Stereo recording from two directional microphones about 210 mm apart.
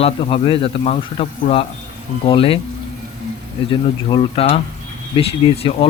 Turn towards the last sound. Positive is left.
turn(degrees=25)  # may be behind; listen again after turning